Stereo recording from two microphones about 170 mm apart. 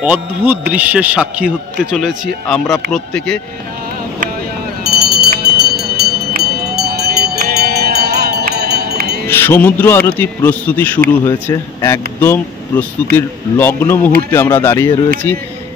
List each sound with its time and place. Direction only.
0.0 s a man's voice: 10° right (ahead or behind)
4.8 s a sound: 70° right (ahead or behind)
9.3 s a man's voice: 15° left (ahead or behind)